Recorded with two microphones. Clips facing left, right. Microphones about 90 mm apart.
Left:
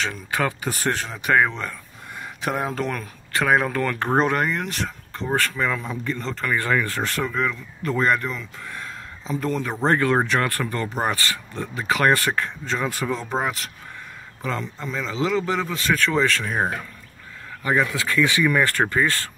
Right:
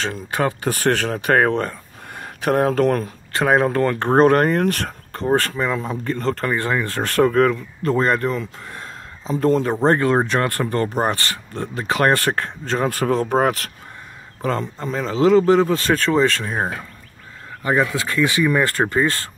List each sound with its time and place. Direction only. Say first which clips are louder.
0.0 s speech: right 3 dB; 35° right (ahead or behind)
0.7 s speech: right 6 dB; 65° right (ahead or behind)
1.2 s speech: right 2 dB; 50° right (ahead or behind)
3.0 s speech: right 3 dB; 35° right (ahead or behind)
4.2 s speech: right 10 dB; 45° right (ahead or behind)
5.8 s speech: right 4 dB; 35° right (ahead or behind)
6.1 s speech: right 8 dB; 50° right (ahead or behind)
6.4 s speech: left 3 dB; 25° right (ahead or behind)
6.9 s speech: right 8 dB; 45° right (ahead or behind)
7.9 s speech: right 3 dB; 35° right (ahead or behind)
10.7 s speech: right 5 dB; 40° right (ahead or behind); by 13.7 s 55° right (ahead or behind)
14.4 s speech: right 5 dB; 40° right (ahead or behind)
17.6 s speech: right 2 dB; 30° right (ahead or behind)